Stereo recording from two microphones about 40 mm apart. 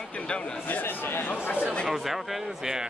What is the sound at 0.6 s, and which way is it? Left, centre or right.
Speech, left.